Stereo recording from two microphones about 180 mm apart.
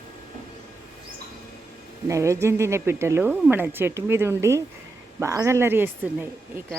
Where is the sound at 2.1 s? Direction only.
15° right (ahead or behind).